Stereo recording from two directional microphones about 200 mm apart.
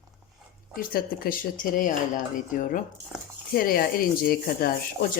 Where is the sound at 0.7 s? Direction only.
45° left (ahead or behind).